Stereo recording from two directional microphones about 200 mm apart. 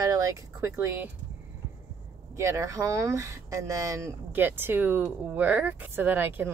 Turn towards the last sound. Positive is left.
turn(degrees=-10)  # may be behind; listen again after turning